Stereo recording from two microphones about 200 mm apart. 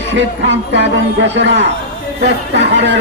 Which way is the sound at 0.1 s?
65° right (ahead or behind).